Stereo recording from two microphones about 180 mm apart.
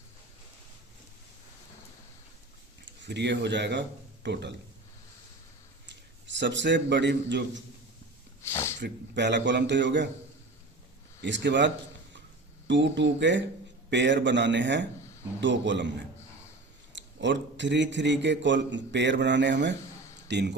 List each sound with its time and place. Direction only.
2.8 s speech: 75° right (ahead or behind)
5.8 s a man's voice: 80° right
8.4 s a sound: 15° left (ahead or behind)
8.8 s a man's voice: 75° right (ahead or behind)
11.2 s a man's voice: 80° right
16.9 s a man's voice: 85° right